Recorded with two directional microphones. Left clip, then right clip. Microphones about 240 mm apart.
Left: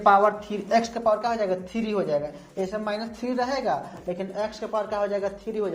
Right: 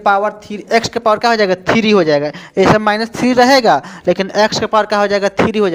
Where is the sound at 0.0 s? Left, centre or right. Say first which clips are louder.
Right 5 dB; right.